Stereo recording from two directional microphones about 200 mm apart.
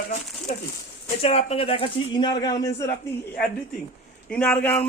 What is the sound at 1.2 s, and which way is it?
Speech, 30° left (ahead or behind).